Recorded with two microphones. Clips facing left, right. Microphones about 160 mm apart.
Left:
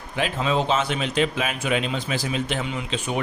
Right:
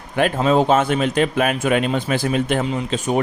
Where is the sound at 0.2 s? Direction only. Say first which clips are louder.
Right 7 dB; 50° right (ahead or behind).